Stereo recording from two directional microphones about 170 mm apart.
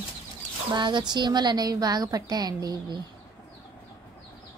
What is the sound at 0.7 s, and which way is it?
Speech, 25° right (ahead or behind).